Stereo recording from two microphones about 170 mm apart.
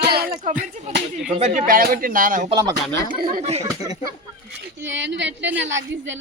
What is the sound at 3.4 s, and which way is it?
Speech, 40° right (ahead or behind).